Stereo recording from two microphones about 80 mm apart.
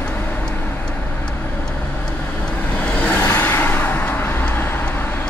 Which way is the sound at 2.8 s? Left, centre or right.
Centre.